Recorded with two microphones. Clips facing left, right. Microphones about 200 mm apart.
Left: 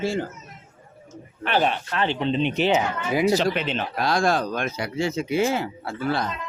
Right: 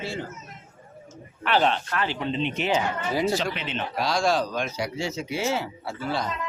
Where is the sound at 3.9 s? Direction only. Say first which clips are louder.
Left 1 dB; 55° left (ahead or behind).